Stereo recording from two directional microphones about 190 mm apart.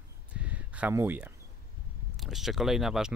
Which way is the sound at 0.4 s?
5° right (ahead or behind).